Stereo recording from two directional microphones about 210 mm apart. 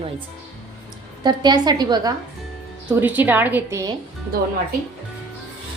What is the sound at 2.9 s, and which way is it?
A woman's voice, 10° right (ahead or behind).